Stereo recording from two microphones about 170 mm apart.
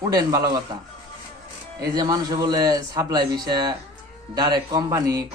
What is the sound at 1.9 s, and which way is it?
A man's voice, 20° right (ahead or behind).